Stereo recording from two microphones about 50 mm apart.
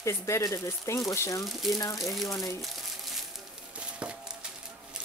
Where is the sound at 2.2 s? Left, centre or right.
Left.